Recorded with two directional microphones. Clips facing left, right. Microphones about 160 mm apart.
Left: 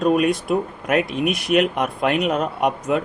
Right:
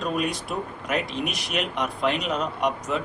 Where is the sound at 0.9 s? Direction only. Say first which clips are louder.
Left 7 dB; 55° left (ahead or behind).